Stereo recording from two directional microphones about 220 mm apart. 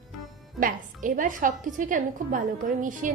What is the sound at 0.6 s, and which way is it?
A woman's voice, 40° right (ahead or behind).